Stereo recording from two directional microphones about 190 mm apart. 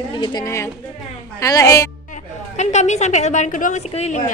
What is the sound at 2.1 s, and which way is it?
A woman's voice, 35° left (ahead or behind).